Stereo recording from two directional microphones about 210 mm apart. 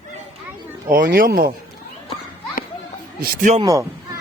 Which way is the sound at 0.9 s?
40° right (ahead or behind).